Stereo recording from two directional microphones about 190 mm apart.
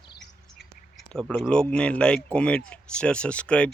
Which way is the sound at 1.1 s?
5° left (ahead or behind).